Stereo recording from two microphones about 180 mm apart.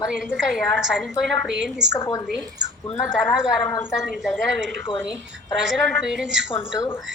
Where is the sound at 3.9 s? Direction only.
Centre (ahead or behind).